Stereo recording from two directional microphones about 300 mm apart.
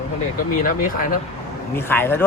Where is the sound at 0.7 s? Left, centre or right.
Left.